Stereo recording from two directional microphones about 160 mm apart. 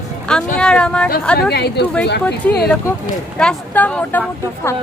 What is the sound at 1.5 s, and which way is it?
Speech, 90° left.